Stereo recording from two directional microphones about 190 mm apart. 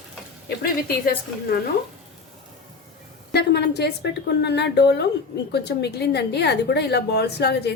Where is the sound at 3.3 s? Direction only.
60° left (ahead or behind).